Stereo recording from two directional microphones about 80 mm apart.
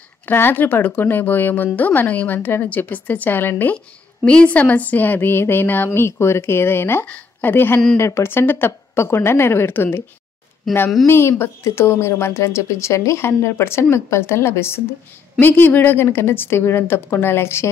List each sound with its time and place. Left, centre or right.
0.2 s a woman's voice: left
3.7 s a woman's voice: centre
11.1 s a woman's voice: left